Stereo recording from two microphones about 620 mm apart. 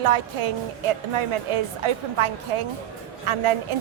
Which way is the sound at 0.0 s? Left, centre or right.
Right.